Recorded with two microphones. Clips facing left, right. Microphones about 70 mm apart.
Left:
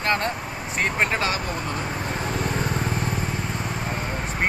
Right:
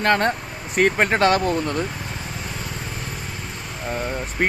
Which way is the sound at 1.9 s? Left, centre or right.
Left.